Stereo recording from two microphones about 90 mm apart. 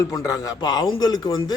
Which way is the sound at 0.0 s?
40° left (ahead or behind).